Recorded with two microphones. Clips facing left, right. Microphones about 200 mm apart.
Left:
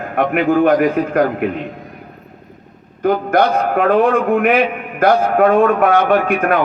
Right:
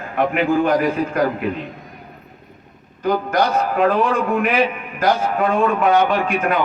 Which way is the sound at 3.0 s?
55° left (ahead or behind).